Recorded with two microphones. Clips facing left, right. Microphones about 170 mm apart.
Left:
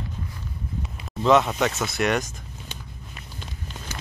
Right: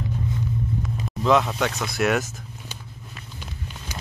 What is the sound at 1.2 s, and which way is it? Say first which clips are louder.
Speech: left 1 dB; centre (ahead or behind).